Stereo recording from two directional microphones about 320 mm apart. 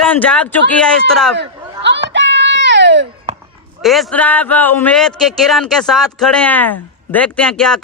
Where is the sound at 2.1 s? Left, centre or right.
Right.